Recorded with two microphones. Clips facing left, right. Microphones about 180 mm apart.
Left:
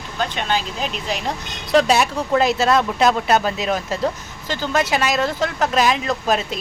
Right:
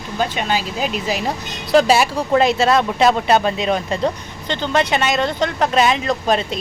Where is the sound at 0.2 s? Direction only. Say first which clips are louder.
Right 2 dB; 10° right (ahead or behind).